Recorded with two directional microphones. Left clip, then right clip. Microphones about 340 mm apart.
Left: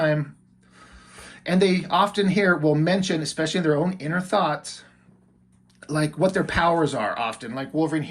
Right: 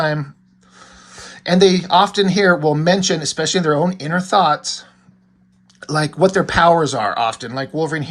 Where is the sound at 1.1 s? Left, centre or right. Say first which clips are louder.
Right 8 dB; centre.